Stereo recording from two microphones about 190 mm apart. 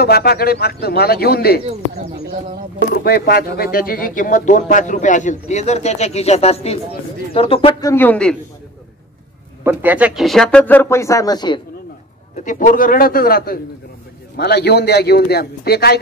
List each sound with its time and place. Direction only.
0.0 s a man's voice: 55° left (ahead or behind)
2.9 s speech: 55° left (ahead or behind); by 7.9 s 30° left (ahead or behind)
7.9 s speech: 10° left (ahead or behind)
9.6 s speech: 10° right (ahead or behind); by 11.6 s 20° left (ahead or behind)
12.4 s a man's voice: 40° left (ahead or behind)